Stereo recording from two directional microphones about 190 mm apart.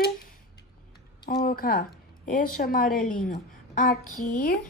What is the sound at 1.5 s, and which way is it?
Speech, 50° left (ahead or behind).